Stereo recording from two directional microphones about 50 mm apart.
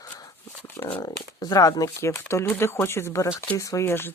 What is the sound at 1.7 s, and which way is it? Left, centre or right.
Speech, left.